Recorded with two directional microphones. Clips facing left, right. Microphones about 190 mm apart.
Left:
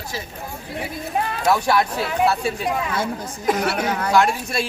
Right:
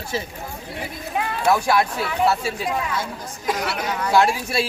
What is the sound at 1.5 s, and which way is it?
Speech, centre (ahead or behind).